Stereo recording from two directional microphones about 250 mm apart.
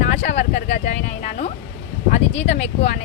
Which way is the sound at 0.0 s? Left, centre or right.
Left.